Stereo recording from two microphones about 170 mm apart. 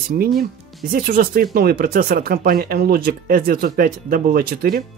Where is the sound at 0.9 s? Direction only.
60° right (ahead or behind).